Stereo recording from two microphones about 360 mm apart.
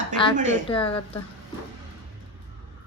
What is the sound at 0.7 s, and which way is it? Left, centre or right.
Speech, centre.